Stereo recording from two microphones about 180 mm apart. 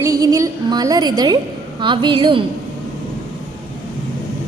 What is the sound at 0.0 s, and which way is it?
A woman's voice, 20° right (ahead or behind).